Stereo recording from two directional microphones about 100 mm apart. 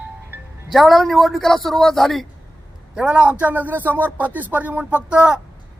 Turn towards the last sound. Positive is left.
turn(degrees=-10)  # may be behind; listen again after turning